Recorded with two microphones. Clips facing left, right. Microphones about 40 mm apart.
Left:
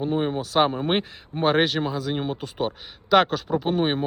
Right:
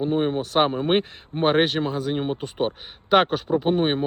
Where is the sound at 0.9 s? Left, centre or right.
Right.